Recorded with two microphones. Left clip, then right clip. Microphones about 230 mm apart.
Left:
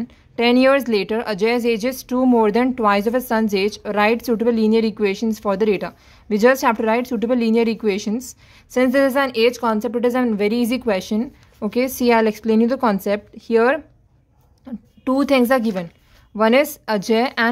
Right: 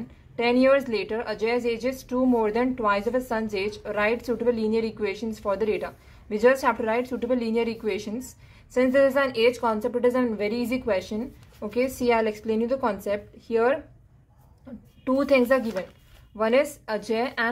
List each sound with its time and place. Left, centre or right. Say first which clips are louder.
0.4 s a woman's voice: left 5 dB; left